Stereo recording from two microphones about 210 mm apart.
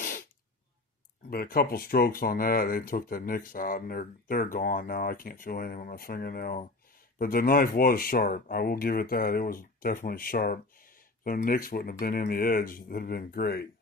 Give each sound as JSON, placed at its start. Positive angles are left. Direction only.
{"t": 1.3, "sound": "speech", "side_deg": 45}